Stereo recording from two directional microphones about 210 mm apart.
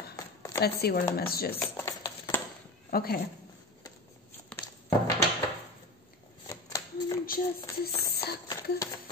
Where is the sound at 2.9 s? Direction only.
45° left (ahead or behind).